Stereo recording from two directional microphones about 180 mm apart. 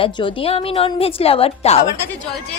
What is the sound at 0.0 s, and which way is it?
A woman's voice, 30° left (ahead or behind).